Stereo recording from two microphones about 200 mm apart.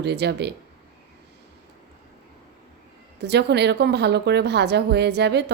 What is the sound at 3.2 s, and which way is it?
A woman's voice, 55° right (ahead or behind).